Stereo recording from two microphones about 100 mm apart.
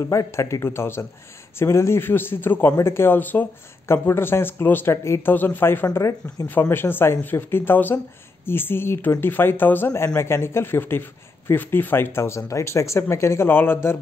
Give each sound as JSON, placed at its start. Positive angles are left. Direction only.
{"t": 0.1, "sound": "a man's voice", "side_deg": 30}